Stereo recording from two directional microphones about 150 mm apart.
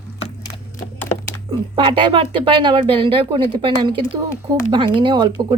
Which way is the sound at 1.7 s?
35° right (ahead or behind).